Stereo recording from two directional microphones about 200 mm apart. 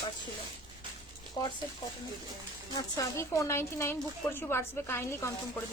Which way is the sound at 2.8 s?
15° left (ahead or behind).